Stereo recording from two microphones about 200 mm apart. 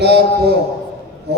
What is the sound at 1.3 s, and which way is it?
Speech, 55° right (ahead or behind).